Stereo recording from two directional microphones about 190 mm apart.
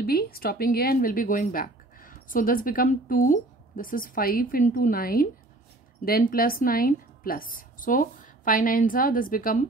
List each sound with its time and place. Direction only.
0.0 s speech: 55° left (ahead or behind)